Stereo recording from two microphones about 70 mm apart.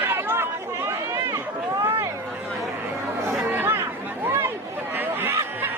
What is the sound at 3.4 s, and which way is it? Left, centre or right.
Chatter, right.